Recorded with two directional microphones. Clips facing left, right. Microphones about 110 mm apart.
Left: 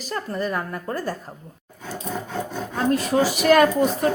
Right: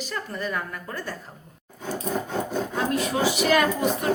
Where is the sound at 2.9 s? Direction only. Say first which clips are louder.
Left 6 dB; 45° left (ahead or behind).